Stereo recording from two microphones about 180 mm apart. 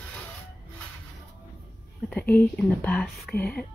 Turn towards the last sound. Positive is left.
turn(degrees=5)  # may be behind; listen again after turning